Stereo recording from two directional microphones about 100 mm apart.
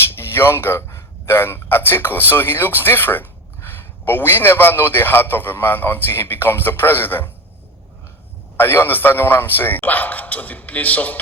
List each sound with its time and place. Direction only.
0.2 s a man's voice: 25° left (ahead or behind)
8.5 s a man's voice: 25° left (ahead or behind)